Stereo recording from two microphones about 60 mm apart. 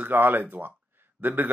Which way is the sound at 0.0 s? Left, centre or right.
Right.